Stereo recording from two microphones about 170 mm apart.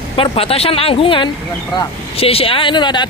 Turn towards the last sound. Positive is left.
turn(degrees=25)  # may be behind; listen again after turning